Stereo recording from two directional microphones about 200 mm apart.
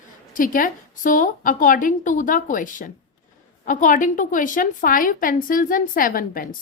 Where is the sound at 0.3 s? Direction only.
45° left (ahead or behind).